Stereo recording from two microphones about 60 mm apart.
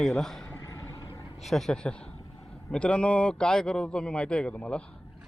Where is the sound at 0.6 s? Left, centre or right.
Left.